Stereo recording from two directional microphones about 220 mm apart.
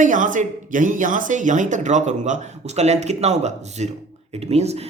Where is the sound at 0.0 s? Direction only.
35° right (ahead or behind).